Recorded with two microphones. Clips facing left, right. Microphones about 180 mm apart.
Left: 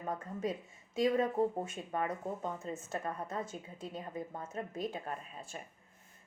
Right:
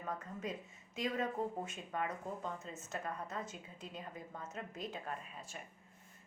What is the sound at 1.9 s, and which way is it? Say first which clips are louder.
Speech: left 4 dB; 30° left (ahead or behind).